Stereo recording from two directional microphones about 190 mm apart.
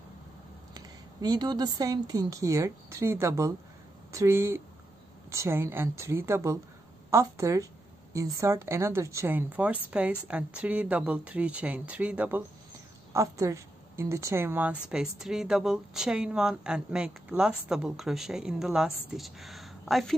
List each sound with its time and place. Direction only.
0.7 s a woman's voice: 20° right (ahead or behind); by 20.2 s centre (ahead or behind)